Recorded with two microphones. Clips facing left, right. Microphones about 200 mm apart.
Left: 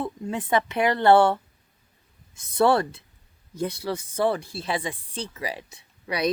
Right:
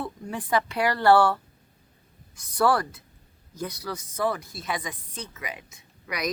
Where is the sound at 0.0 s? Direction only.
25° left (ahead or behind).